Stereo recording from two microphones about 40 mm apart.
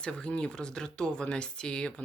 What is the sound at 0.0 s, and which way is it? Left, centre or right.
Speech, left.